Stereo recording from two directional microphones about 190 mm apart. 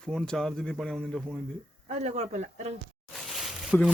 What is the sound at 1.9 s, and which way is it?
Speech, 35° right (ahead or behind).